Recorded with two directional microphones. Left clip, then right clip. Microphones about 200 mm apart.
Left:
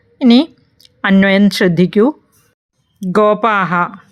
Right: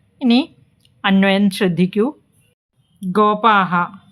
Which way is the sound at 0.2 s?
25° left (ahead or behind).